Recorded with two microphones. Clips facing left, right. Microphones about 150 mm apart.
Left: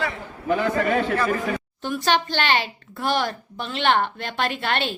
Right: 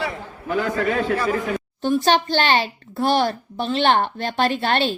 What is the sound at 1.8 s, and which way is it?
A child's voice, 30° right (ahead or behind).